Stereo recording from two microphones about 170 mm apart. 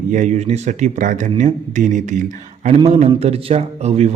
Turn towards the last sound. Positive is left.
turn(degrees=-40)  # may be behind; listen again after turning